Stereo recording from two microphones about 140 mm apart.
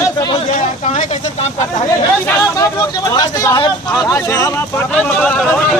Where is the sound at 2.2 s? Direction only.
25° left (ahead or behind).